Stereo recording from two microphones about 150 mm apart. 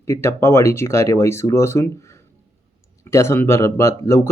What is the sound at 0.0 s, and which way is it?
Speech, 20° left (ahead or behind).